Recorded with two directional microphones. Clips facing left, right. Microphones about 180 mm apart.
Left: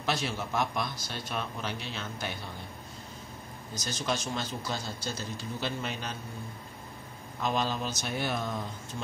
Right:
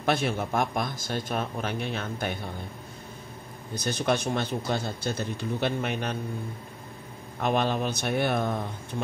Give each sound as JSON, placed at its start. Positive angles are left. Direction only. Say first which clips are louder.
{"t": 0.0, "sound": "speech", "louder": "right 6 dB", "side_deg": -55}
{"t": 3.7, "sound": "speech", "louder": "right 7 dB", "side_deg": -60}
{"t": 7.3, "sound": "speech", "louder": "right 5 dB", "side_deg": -60}